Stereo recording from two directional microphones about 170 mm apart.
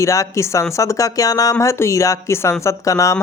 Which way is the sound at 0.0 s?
20° left (ahead or behind).